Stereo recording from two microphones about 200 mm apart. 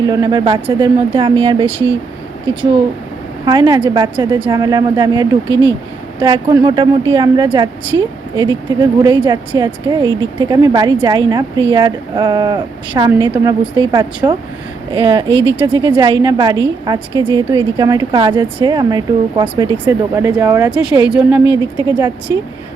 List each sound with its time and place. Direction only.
0.0 s speech: 20° right (ahead or behind)
3.4 s a woman's voice: 20° right (ahead or behind); by 21.4 s 5° right (ahead or behind)
21.8 s speech: 15° right (ahead or behind)